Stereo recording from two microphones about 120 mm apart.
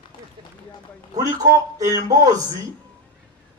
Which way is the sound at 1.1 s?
30° right (ahead or behind).